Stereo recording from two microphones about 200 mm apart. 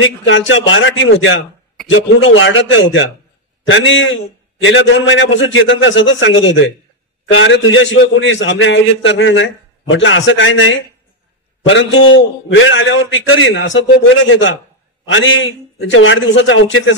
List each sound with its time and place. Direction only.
0.0 s a man's voice: 75° left (ahead or behind)